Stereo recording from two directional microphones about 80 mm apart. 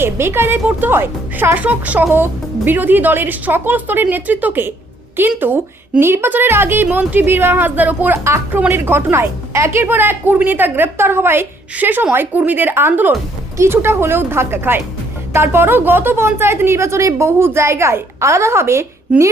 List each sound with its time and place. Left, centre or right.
0.0 s speech: right